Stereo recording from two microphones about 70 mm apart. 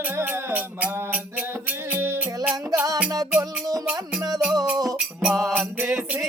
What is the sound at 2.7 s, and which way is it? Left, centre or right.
Music, right.